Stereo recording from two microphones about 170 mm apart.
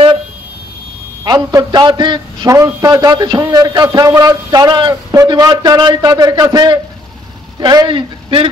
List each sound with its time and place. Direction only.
1.2 s a man's voice: 25° right (ahead or behind)